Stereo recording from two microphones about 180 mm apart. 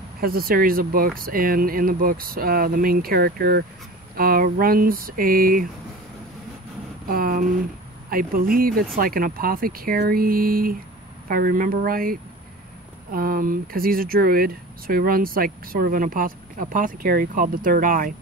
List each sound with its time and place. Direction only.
0.2 s speech: 55° right (ahead or behind)
7.1 s speech: 55° right (ahead or behind)